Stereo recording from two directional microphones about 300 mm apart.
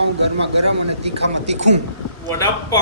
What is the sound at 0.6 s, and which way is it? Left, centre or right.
Speech, right.